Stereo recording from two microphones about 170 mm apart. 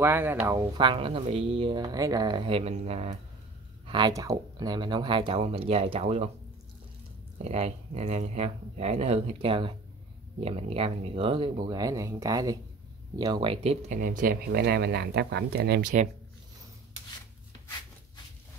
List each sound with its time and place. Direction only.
0.0 s speech: 10° right (ahead or behind)
0.7 s speech: 30° right (ahead or behind)
3.8 s speech: 25° right (ahead or behind)
7.4 s speech: 40° right (ahead or behind)
13.8 s speech: 50° right (ahead or behind); by 15.9 s 70° right (ahead or behind)